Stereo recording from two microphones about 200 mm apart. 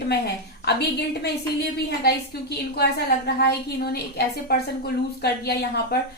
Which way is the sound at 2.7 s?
55° left (ahead or behind).